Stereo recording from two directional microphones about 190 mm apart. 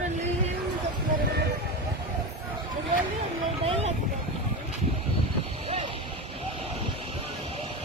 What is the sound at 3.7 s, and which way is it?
Vehicle, 35° right (ahead or behind).